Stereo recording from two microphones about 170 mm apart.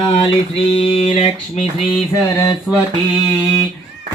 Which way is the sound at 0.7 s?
30° left (ahead or behind).